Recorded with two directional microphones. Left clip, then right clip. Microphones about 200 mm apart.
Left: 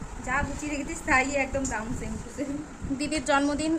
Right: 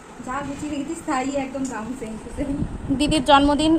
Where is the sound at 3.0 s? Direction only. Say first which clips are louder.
Right 9 dB; 10° right (ahead or behind).